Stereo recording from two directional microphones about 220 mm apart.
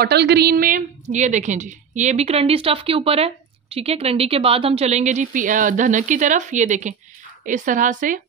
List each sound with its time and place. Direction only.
0.0 s a woman's voice: 50° right (ahead or behind)